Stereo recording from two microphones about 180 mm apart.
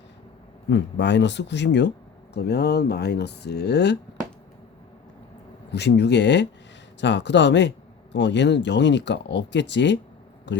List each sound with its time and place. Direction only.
0.7 s speech: 80° left
5.7 s a man's voice: 70° left (ahead or behind)